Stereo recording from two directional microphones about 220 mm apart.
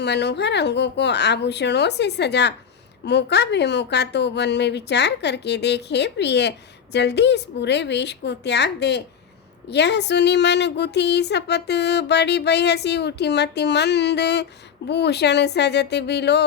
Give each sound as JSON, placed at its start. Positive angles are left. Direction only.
{"t": 0.0, "sound": "speech", "side_deg": 50}